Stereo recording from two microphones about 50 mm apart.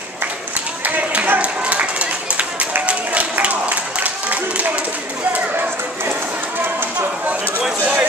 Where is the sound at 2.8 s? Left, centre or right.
Right.